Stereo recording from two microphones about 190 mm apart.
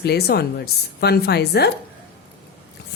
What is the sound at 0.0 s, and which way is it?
Speech, 60° left (ahead or behind).